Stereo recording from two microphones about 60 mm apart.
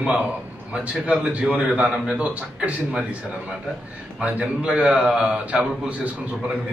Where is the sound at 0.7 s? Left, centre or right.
Right.